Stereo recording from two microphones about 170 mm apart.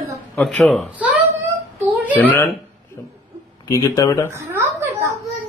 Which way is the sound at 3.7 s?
20° left (ahead or behind).